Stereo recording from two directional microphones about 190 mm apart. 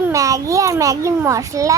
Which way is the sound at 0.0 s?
15° right (ahead or behind).